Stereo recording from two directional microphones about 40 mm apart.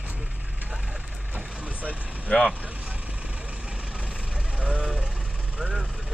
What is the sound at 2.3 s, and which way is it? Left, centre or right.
Speech, left.